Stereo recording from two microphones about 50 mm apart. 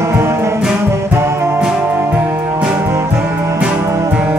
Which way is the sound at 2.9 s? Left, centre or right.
Right.